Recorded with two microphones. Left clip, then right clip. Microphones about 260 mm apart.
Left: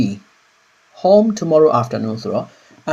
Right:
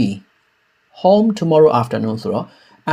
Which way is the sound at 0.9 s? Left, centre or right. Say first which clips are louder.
Left 1 dB; centre.